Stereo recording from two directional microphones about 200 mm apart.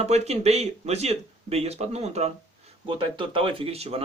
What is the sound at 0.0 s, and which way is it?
Speech, 30° right (ahead or behind).